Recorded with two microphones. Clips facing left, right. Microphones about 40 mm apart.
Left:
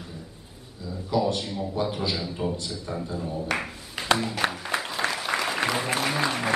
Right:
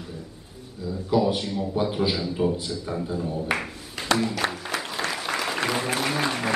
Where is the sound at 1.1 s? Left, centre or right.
Centre.